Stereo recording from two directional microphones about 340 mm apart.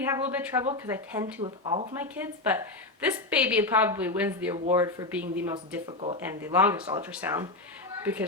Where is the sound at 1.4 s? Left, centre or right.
Centre.